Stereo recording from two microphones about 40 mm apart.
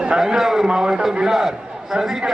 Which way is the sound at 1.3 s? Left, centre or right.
Centre.